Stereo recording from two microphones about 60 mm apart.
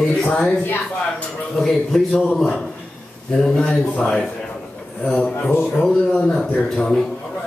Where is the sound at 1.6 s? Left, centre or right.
Centre.